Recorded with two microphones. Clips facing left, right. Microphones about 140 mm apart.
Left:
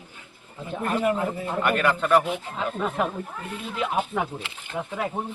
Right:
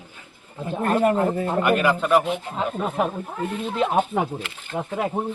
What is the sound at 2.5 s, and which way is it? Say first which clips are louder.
Speech: right 2 dB; 25° right (ahead or behind).